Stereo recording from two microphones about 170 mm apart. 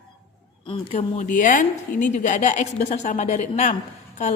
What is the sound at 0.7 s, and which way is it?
A woman's voice, 40° left (ahead or behind).